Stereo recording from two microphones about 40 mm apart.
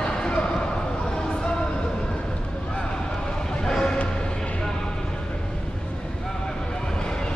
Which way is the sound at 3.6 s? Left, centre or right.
Centre.